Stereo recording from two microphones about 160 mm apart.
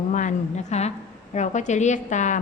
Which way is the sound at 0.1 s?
50° left (ahead or behind).